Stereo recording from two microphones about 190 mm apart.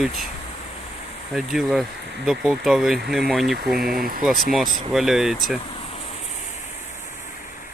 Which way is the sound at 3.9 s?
50° right (ahead or behind).